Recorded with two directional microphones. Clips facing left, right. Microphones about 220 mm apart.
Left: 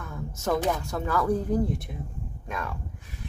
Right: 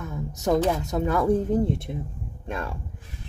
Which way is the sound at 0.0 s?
20° right (ahead or behind).